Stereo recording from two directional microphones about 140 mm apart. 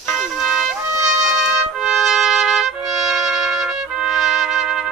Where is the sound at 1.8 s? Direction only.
5° right (ahead or behind).